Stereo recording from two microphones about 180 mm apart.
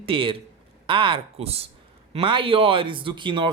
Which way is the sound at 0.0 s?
30° right (ahead or behind).